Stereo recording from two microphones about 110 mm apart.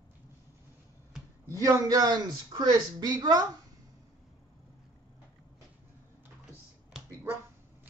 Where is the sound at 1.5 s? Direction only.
30° right (ahead or behind).